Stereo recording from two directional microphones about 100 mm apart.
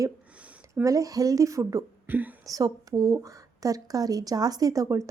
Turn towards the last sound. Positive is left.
turn(degrees=-35)  # may be behind; listen again after turning